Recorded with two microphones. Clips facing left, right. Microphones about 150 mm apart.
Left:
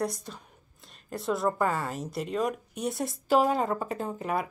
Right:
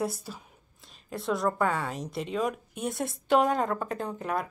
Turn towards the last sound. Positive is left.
turn(degrees=5)  # may be behind; listen again after turning